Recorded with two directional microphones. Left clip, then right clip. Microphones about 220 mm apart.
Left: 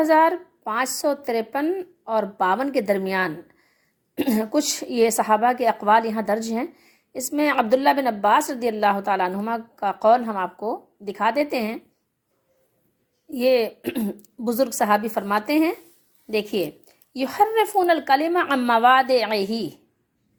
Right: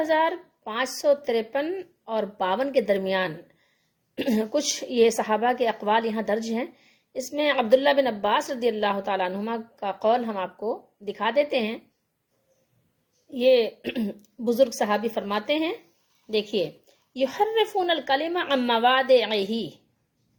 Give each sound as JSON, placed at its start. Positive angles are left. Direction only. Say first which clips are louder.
{"t": 0.0, "sound": "a woman's voice", "louder": "left 6 dB", "side_deg": 15}
{"t": 13.3, "sound": "a woman's voice", "louder": "even", "side_deg": 15}